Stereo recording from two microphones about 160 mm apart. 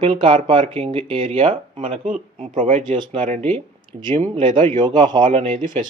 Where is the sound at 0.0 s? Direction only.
30° right (ahead or behind).